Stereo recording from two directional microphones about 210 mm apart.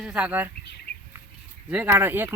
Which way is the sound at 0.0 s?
5° right (ahead or behind).